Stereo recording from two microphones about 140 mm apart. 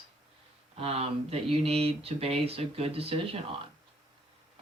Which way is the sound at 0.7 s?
45° right (ahead or behind).